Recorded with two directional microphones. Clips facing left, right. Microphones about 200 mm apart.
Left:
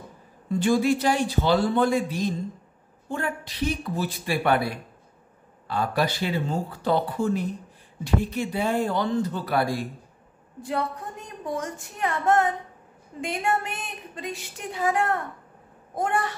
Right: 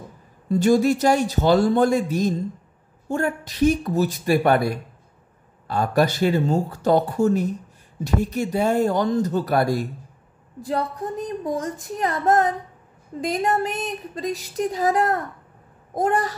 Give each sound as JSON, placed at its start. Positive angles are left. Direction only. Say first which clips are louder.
{"t": 0.5, "sound": "speech", "louder": "right 4 dB", "side_deg": -40}